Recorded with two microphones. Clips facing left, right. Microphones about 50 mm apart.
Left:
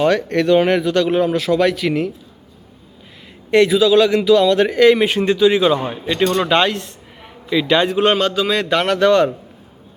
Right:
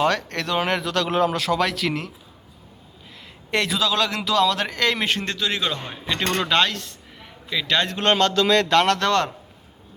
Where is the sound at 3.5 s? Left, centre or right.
Centre.